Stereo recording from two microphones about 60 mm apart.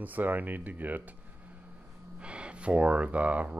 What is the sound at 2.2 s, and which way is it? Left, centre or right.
Speech, centre.